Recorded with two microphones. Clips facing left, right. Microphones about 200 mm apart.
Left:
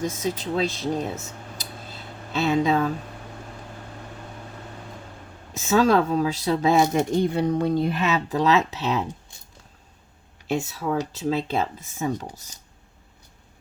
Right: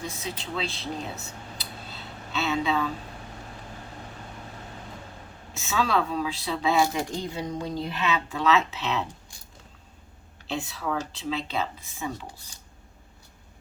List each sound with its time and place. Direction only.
0.0 s speech: 45° left (ahead or behind)
2.5 s speech: 45° left (ahead or behind)
5.5 s speech: 45° left (ahead or behind)
6.9 s speech: 60° left (ahead or behind); by 9.0 s 40° left (ahead or behind)
10.5 s speech: 45° left (ahead or behind)